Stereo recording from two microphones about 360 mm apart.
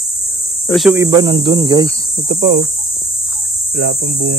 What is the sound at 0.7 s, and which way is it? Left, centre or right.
Speech, centre.